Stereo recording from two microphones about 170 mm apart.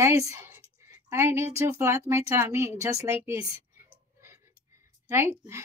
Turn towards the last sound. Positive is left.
turn(degrees=-15)  # may be behind; listen again after turning